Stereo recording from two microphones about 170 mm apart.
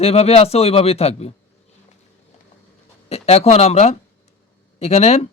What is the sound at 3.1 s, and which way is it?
Speech, 35° left (ahead or behind).